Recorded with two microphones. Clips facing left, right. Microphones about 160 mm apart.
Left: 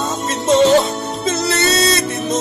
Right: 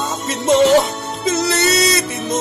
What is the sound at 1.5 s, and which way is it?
Music, 15° right (ahead or behind).